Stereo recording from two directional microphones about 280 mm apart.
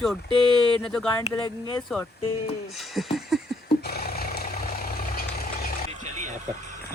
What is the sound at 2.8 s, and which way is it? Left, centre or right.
Speech, centre.